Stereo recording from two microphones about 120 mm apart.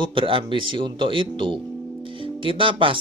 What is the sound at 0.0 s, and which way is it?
Speech, 45° right (ahead or behind).